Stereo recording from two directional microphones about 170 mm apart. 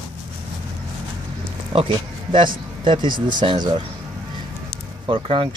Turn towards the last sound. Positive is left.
turn(degrees=-30)  # may be behind; listen again after turning